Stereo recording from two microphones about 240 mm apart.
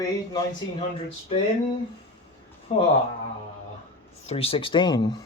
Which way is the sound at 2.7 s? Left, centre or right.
Left.